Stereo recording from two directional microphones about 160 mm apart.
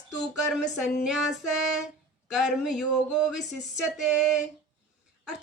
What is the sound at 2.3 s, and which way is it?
Speech, centre (ahead or behind).